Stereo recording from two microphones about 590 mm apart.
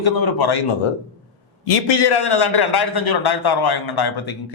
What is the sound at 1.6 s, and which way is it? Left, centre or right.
A man's voice, left.